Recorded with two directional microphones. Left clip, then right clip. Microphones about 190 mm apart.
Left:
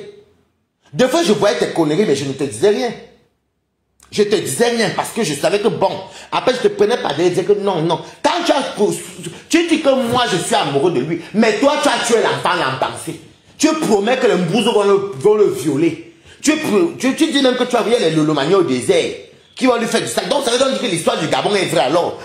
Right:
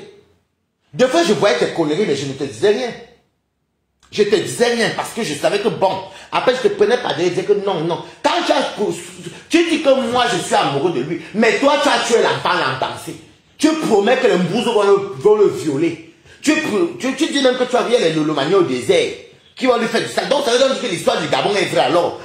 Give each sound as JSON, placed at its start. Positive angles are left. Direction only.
{"t": 0.9, "sound": "speech", "side_deg": 40}
{"t": 4.1, "sound": "speech", "side_deg": 40}
{"t": 10.0, "sound": "speech", "side_deg": 40}